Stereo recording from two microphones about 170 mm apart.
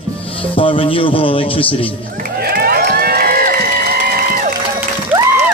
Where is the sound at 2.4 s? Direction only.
65° right (ahead or behind).